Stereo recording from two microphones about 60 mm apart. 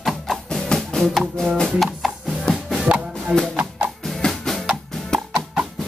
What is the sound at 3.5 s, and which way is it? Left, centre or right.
Music, right.